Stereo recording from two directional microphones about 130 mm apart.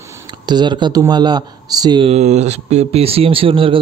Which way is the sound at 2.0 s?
60° right (ahead or behind).